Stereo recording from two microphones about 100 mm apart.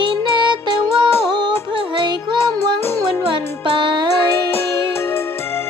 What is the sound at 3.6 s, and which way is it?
Music, 55° right (ahead or behind).